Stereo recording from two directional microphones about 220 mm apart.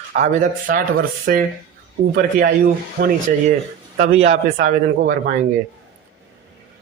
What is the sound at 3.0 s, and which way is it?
Speech, 40° right (ahead or behind).